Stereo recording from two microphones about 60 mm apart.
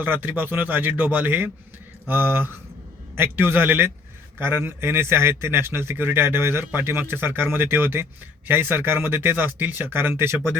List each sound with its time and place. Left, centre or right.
0.0 s a man's voice: right